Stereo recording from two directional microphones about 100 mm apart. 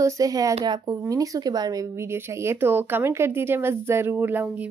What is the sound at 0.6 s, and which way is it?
Speech, 45° right (ahead or behind).